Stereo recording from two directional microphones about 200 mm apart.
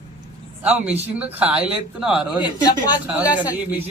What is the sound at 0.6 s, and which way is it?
A man's voice, 5° right (ahead or behind).